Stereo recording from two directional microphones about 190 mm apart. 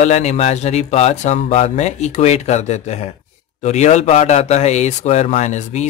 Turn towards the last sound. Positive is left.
turn(degrees=35)  # may be behind; listen again after turning